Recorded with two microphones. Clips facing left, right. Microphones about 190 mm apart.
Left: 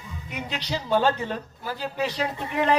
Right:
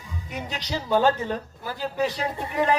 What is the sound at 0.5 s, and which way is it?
A woman's voice, 45° right (ahead or behind).